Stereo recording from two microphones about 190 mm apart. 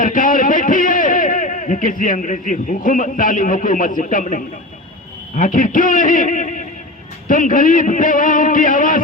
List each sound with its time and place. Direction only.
0.0 s a man's voice: 45° left (ahead or behind)